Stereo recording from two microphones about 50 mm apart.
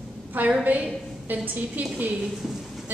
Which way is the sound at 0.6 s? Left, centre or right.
Right.